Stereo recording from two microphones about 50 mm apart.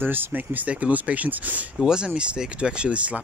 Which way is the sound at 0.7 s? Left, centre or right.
Right.